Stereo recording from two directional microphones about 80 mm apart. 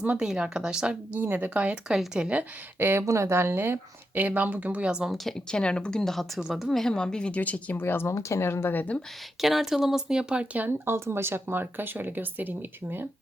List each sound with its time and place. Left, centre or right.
0.2 s speech: centre
2.7 s speech: right; by 5.1 s centre
5.1 s speech: centre; by 8.1 s left
8.1 s speech: left
9.4 s speech: centre
10.7 s speech: right